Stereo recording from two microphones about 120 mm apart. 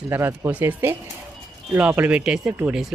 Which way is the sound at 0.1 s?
20° right (ahead or behind).